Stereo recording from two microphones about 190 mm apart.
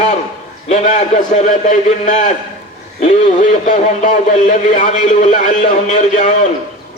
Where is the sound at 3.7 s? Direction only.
40° left (ahead or behind).